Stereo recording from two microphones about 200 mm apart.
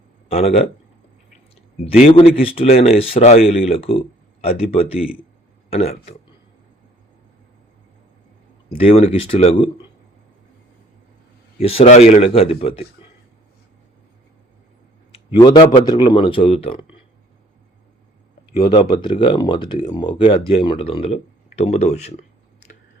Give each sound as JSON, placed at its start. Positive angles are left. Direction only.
{"t": 0.3, "sound": "speech", "side_deg": 30}
{"t": 2.0, "sound": "speech", "side_deg": 30}
{"t": 8.8, "sound": "speech", "side_deg": 30}
{"t": 11.6, "sound": "speech", "side_deg": 30}
{"t": 15.4, "sound": "speech", "side_deg": 20}
{"t": 18.6, "sound": "speech", "side_deg": 25}